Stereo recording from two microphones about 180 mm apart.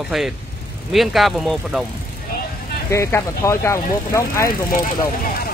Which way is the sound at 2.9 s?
15° left (ahead or behind).